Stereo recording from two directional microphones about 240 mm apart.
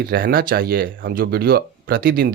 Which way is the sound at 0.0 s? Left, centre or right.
Right.